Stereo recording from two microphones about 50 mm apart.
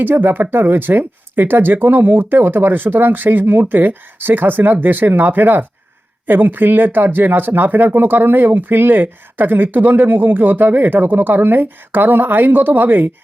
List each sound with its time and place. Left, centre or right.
0.0 s speech: right